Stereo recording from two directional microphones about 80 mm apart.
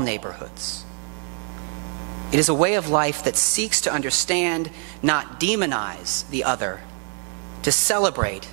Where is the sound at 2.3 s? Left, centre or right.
Right.